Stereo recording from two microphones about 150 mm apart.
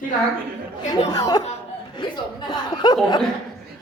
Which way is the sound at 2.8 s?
25° left (ahead or behind).